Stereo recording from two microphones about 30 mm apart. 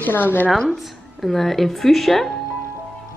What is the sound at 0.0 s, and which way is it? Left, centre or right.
Speech, left.